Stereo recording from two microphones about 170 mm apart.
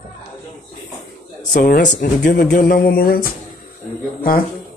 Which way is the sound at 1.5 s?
55° left (ahead or behind).